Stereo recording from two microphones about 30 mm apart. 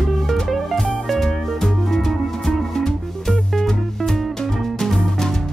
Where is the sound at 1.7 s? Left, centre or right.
Centre.